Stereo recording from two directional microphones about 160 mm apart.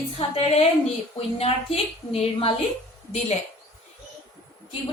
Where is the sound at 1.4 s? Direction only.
40° left (ahead or behind).